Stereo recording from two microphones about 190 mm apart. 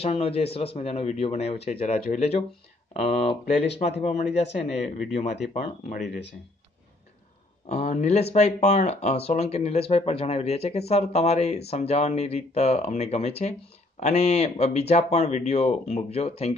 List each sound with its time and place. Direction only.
0.0 s speech: 30° left (ahead or behind)
7.6 s speech: 35° left (ahead or behind)